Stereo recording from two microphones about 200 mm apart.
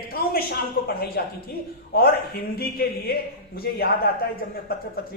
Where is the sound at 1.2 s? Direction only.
50° left (ahead or behind).